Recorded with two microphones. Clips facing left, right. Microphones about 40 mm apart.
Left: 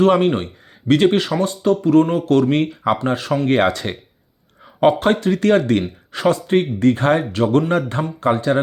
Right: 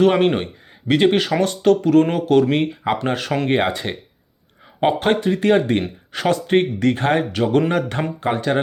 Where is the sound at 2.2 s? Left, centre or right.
Right.